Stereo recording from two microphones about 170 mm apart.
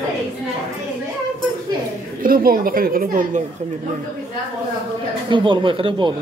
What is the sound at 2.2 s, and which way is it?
A woman's voice, 60° right (ahead or behind).